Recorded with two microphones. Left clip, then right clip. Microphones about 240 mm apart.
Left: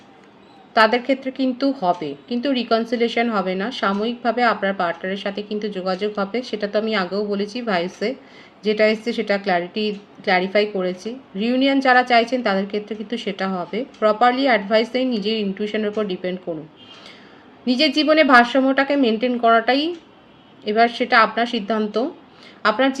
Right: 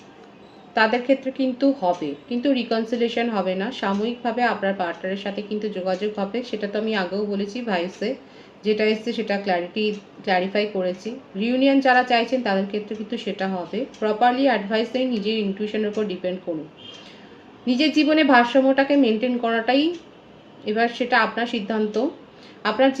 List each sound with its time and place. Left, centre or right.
0.7 s a woman's voice: left
17.7 s a woman's voice: left